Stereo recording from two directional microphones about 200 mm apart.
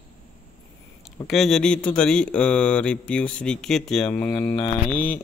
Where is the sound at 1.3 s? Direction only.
Centre (ahead or behind).